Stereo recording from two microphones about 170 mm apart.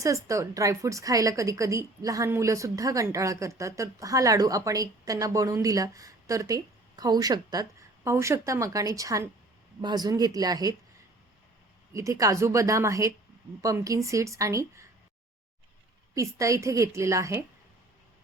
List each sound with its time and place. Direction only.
0.0 s a woman's voice: 20° right (ahead or behind)
11.9 s a woman's voice: 20° right (ahead or behind)
16.1 s a woman's voice: 20° right (ahead or behind)